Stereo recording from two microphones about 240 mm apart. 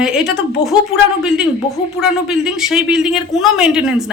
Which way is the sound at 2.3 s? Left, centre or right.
Centre.